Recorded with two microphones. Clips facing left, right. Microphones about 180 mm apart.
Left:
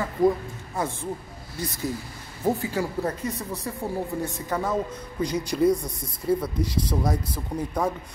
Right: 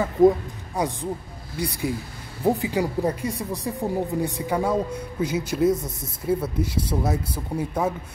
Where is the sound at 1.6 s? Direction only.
10° right (ahead or behind).